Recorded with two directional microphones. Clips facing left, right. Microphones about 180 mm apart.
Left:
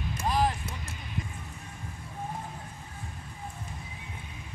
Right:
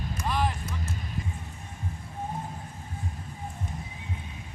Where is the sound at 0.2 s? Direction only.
35° left (ahead or behind).